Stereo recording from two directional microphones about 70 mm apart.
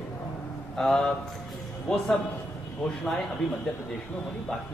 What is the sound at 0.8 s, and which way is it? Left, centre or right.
Speech, centre.